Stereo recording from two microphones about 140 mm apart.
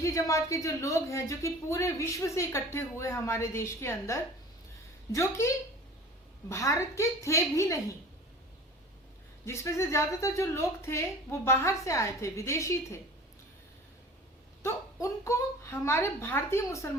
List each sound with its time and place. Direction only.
0.0 s speech: 20° left (ahead or behind)
9.5 s speech: 20° left (ahead or behind)
15.0 s speech: 20° left (ahead or behind)